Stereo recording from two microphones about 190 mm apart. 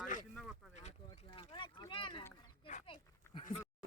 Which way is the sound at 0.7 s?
35° left (ahead or behind).